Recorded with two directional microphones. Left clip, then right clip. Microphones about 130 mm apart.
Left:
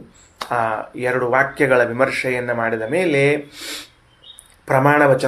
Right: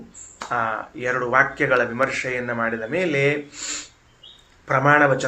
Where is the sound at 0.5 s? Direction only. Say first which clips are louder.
Left 3 dB; 40° left (ahead or behind).